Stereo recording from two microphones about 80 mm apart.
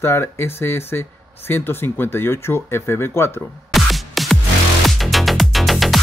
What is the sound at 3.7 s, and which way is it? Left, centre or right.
Music, centre.